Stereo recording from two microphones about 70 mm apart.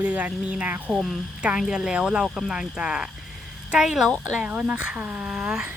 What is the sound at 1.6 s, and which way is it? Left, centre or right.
Speech, centre.